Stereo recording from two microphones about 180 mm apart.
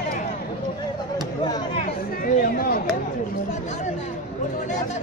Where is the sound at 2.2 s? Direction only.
50° left (ahead or behind).